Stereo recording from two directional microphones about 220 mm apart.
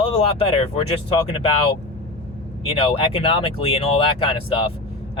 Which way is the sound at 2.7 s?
25° left (ahead or behind).